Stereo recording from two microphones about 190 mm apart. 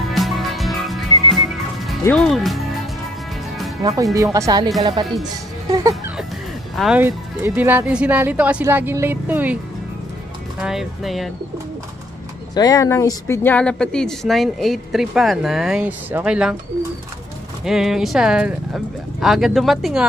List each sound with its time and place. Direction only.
0.1 s music: centre (ahead or behind)
2.0 s speech: 5° left (ahead or behind)
3.8 s speech: 15° right (ahead or behind)
5.7 s music: 15° right (ahead or behind)
6.8 s speech: 5° right (ahead or behind)
10.6 s speech: centre (ahead or behind)
12.5 s speech: 20° left (ahead or behind); by 16.5 s 5° right (ahead or behind)
17.6 s speech: centre (ahead or behind)